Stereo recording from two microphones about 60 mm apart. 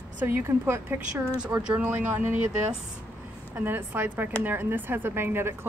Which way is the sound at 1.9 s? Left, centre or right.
Right.